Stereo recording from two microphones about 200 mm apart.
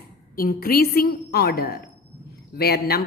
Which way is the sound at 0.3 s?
45° left (ahead or behind).